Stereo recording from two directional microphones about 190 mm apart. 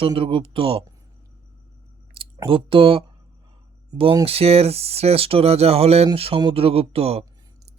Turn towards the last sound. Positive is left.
turn(degrees=-30)  # may be behind; listen again after turning